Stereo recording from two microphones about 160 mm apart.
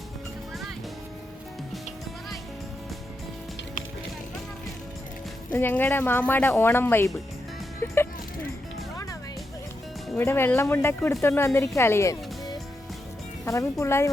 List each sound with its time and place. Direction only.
5.5 s a woman's voice: 10° left (ahead or behind)
10.2 s a woman's voice: 15° left (ahead or behind)